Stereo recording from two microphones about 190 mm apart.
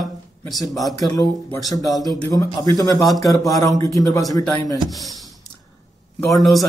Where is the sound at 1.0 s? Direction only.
20° left (ahead or behind).